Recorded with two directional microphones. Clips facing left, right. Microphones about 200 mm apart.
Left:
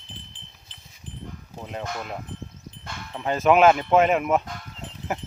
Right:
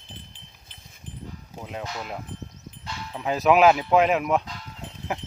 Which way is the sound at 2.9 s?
50° left (ahead or behind).